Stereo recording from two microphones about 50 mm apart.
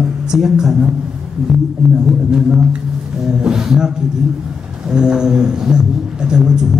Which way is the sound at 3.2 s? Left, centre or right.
Centre.